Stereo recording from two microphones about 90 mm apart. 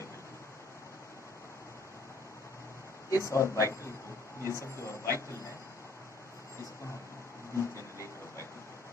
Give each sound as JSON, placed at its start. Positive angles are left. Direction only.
{"t": 3.1, "sound": "speech", "side_deg": 35}
{"t": 7.5, "sound": "vehicle", "side_deg": 35}